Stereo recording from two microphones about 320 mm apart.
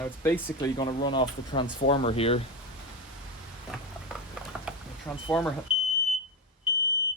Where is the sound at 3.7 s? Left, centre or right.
Centre.